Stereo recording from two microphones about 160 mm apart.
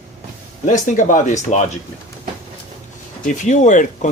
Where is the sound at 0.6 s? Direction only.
50° left (ahead or behind).